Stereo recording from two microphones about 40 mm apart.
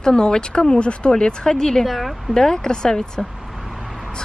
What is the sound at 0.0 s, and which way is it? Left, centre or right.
Speech, centre.